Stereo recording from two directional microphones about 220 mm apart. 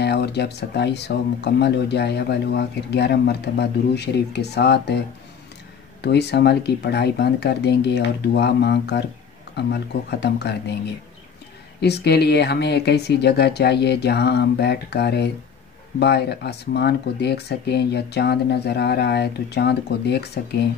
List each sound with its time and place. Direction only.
0.0 s speech: 50° left (ahead or behind)
6.0 s speech: 50° left (ahead or behind)
11.8 s speech: 50° left (ahead or behind)